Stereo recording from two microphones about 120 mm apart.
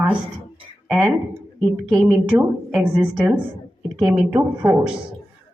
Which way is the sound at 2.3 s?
10° right (ahead or behind).